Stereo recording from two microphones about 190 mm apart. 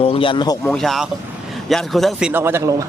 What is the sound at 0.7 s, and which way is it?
Speech, centre (ahead or behind).